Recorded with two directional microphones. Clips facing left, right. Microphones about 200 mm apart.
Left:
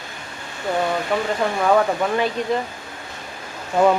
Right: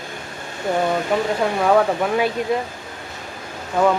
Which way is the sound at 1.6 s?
5° right (ahead or behind).